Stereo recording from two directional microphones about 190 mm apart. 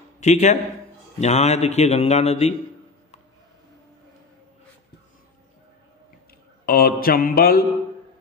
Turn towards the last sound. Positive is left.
turn(degrees=55)  # may be behind; listen again after turning